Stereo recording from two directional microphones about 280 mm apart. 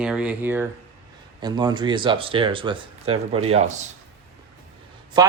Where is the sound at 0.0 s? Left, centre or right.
Centre; by 3.8 s right.